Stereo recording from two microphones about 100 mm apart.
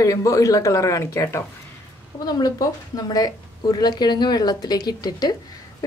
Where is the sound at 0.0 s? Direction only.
35° left (ahead or behind).